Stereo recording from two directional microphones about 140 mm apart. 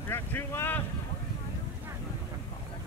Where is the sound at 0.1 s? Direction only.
15° left (ahead or behind).